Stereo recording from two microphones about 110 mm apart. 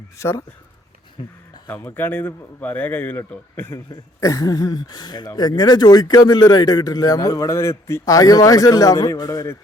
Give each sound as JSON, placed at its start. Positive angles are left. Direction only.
{"t": 0.2, "sound": "speech", "side_deg": 25}
{"t": 1.2, "sound": "speech", "side_deg": 50}
{"t": 1.6, "sound": "a man's voice", "side_deg": 15}
{"t": 4.2, "sound": "a man's voice", "side_deg": 30}